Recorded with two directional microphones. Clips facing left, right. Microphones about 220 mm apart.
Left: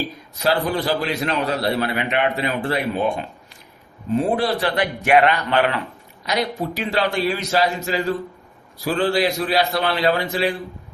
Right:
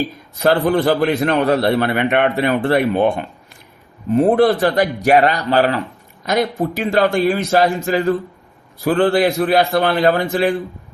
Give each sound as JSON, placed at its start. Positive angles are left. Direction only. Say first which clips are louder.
{"t": 0.3, "sound": "a man's voice", "louder": "right 6 dB", "side_deg": -55}
{"t": 6.2, "sound": "a man's voice", "louder": "right 5 dB", "side_deg": -50}